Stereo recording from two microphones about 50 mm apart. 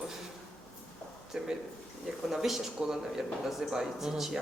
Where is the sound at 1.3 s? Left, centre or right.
Centre.